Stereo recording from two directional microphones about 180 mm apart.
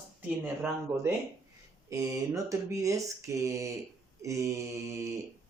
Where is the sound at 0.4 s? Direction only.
10° right (ahead or behind).